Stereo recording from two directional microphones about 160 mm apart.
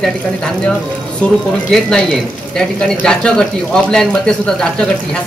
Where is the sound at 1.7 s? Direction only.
5° left (ahead or behind).